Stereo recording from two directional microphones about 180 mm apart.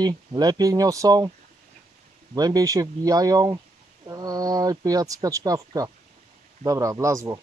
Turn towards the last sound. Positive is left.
turn(degrees=-20)  # may be behind; listen again after turning